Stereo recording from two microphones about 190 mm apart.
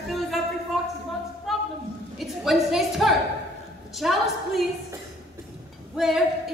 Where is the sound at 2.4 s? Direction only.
Centre (ahead or behind).